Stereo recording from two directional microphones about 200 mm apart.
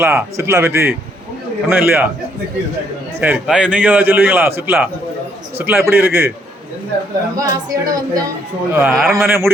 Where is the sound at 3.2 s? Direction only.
5° right (ahead or behind).